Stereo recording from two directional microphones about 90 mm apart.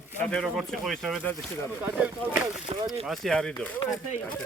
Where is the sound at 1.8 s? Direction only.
15° right (ahead or behind).